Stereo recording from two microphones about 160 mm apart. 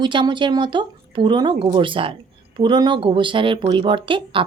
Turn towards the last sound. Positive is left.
turn(degrees=-30)  # may be behind; listen again after turning